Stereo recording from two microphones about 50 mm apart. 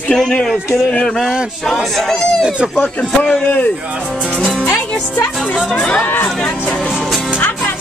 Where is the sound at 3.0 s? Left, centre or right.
Left.